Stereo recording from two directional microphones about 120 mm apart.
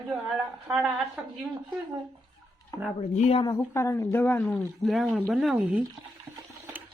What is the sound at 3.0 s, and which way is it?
Speech, 65° left (ahead or behind).